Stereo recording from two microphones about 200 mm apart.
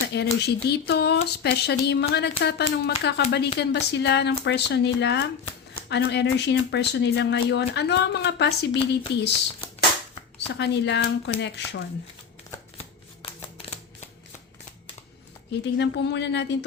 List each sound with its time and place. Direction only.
0.1 s speech: 55° left (ahead or behind)
10.3 s speech: 60° left (ahead or behind)
15.6 s speech: 60° left (ahead or behind)